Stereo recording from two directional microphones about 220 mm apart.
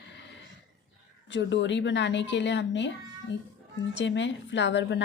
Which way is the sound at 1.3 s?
55° left (ahead or behind).